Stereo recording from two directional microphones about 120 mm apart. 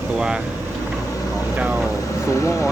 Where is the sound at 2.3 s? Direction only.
25° left (ahead or behind).